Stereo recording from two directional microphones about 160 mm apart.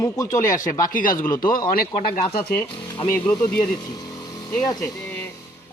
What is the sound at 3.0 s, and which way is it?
Speech, 20° left (ahead or behind).